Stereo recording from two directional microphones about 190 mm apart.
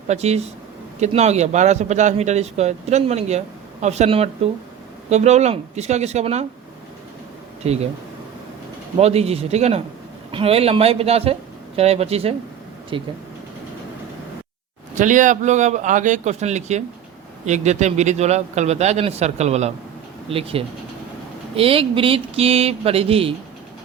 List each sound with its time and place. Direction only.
0.1 s speech: 35° right (ahead or behind)
7.6 s speech: 35° right (ahead or behind)
9.0 s speech: 35° right (ahead or behind)
14.9 s speech: 40° right (ahead or behind)